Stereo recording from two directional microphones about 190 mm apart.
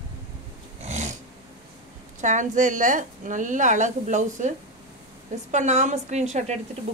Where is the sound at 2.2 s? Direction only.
40° right (ahead or behind).